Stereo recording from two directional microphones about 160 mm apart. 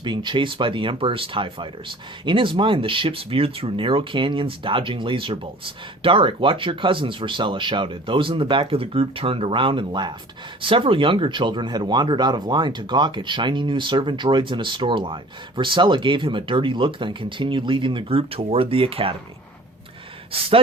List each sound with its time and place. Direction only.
0.0 s speech: 30° right (ahead or behind)